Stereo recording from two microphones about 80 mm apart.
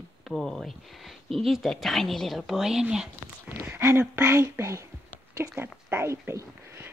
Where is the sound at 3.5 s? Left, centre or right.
Right.